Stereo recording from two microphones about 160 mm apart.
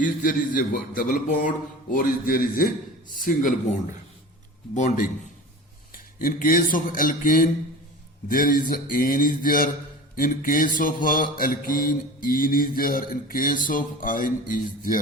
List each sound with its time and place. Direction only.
0.0 s mantra: 60° left (ahead or behind)
4.7 s a man's voice: 50° left (ahead or behind)
5.9 s mantra: 60° left (ahead or behind)